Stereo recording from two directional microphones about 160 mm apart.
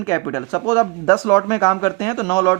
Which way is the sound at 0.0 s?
20° left (ahead or behind).